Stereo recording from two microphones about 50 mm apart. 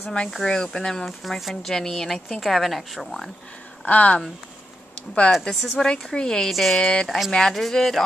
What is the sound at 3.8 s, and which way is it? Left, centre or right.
Speech, left.